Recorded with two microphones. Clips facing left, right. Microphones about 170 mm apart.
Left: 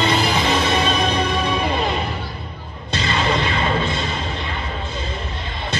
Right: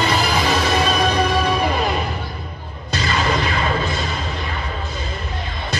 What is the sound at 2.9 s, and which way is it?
Music, 30° left (ahead or behind).